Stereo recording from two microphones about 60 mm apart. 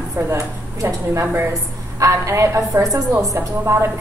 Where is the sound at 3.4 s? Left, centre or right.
Right.